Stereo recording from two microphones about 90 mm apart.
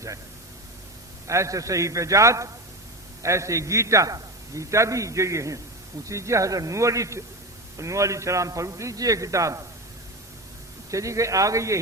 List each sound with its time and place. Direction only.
1.3 s a man's voice: 35° right (ahead or behind)
10.9 s a man's voice: 35° right (ahead or behind)